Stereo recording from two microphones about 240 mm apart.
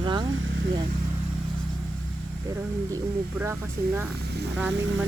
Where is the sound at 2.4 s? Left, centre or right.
Centre.